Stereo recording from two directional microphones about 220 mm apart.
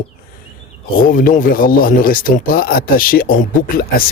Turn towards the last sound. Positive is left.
turn(degrees=40)  # may be behind; listen again after turning